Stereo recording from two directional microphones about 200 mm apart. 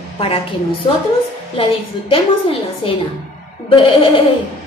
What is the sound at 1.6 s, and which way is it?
A woman's voice, 25° left (ahead or behind).